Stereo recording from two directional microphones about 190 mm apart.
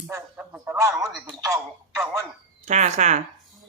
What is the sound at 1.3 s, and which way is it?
Speech, 15° right (ahead or behind).